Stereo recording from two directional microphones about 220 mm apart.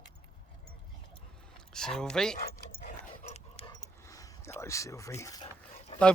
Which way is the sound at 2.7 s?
35° left (ahead or behind).